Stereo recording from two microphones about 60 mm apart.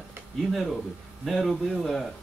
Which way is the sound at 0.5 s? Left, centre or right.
Centre.